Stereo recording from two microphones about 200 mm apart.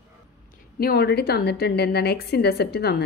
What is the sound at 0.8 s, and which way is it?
A woman's voice, 50° left (ahead or behind).